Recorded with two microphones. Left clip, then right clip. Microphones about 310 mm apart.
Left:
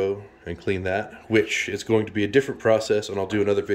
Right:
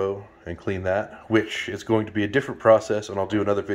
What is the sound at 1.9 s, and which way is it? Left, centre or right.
Speech, centre.